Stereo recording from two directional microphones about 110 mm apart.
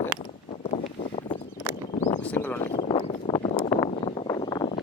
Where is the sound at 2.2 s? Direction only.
15° left (ahead or behind).